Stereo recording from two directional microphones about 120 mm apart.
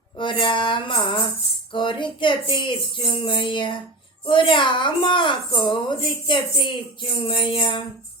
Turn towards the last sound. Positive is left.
turn(degrees=45)  # may be behind; listen again after turning